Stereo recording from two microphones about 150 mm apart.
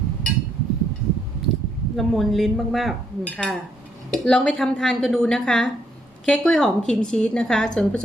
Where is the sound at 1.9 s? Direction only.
Centre (ahead or behind).